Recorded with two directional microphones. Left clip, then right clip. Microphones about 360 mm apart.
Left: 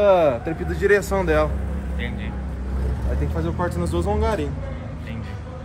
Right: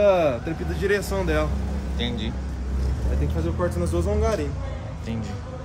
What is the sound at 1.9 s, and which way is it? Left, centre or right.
Speech, centre.